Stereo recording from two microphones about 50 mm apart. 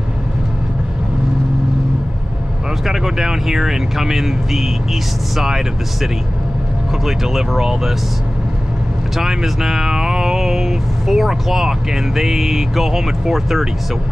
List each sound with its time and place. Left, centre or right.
2.8 s speech: centre
7.1 s speech: centre
9.1 s speech: centre